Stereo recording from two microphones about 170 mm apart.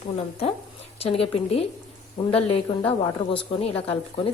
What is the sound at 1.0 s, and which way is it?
A woman's voice, 35° left (ahead or behind).